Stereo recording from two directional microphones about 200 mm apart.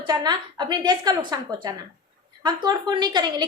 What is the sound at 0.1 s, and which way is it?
A woman's voice, 20° right (ahead or behind).